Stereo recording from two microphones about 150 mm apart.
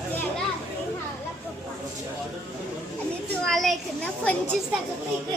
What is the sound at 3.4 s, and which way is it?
Children playing, centre (ahead or behind).